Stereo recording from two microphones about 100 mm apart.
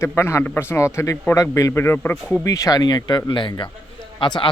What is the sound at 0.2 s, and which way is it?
A man's voice, 25° left (ahead or behind).